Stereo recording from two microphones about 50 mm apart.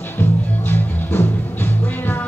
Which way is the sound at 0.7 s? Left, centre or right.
Left.